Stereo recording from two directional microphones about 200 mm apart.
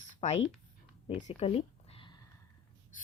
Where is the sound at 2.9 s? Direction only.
40° left (ahead or behind).